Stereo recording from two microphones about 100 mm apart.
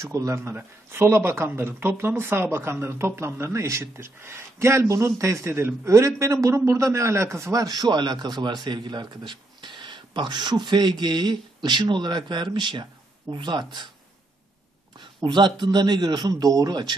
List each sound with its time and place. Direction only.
0.0 s a man's voice: 30° right (ahead or behind); by 13.7 s 50° right (ahead or behind)
15.0 s speech: 50° right (ahead or behind)